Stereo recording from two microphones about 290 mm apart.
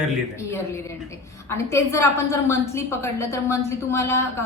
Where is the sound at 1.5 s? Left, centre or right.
Centre.